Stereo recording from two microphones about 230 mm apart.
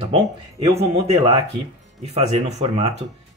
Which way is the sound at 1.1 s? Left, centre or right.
Right.